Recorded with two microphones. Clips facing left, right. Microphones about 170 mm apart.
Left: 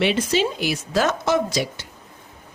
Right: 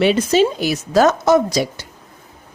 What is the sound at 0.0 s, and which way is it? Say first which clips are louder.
A woman's voice: right 6 dB; 40° right (ahead or behind).